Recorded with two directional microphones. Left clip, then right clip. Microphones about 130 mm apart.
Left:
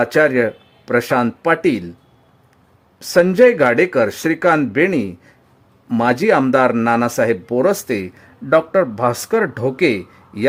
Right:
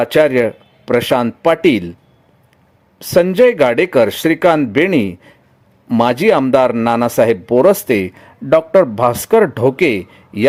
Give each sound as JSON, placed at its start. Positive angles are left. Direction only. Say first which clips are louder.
{"t": 0.0, "sound": "speech", "louder": "right 2 dB", "side_deg": -20}
{"t": 3.0, "sound": "speech", "louder": "right 1 dB", "side_deg": -20}